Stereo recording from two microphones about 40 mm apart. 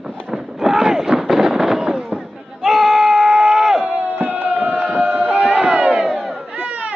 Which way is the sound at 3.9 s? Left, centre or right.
Right.